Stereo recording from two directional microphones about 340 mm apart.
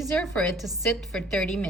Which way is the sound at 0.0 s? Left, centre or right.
Centre.